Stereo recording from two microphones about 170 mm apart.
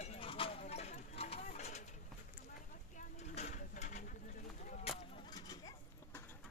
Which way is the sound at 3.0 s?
45° left (ahead or behind).